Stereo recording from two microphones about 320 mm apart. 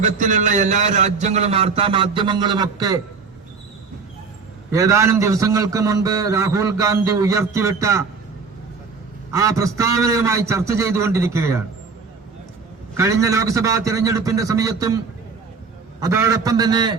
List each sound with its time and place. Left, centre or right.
0.0 s a man's voice: right
4.7 s a man's voice: centre
9.3 s a man's voice: centre
13.0 s a man's voice: centre